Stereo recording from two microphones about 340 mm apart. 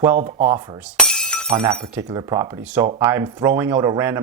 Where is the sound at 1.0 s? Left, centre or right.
Centre.